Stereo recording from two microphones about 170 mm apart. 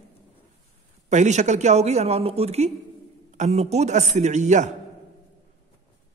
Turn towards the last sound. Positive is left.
turn(degrees=-45)  # may be behind; listen again after turning